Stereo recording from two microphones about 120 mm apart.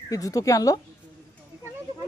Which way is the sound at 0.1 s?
30° left (ahead or behind).